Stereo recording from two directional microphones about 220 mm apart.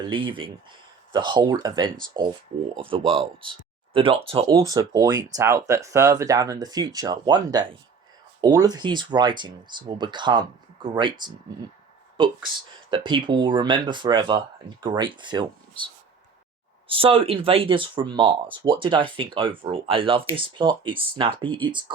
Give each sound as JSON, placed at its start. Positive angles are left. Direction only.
{"t": 0.1, "sound": "speech", "side_deg": -20}
{"t": 16.9, "sound": "speech", "side_deg": -25}